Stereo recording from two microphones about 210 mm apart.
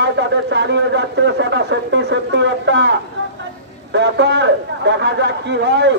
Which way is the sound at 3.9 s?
55° right (ahead or behind).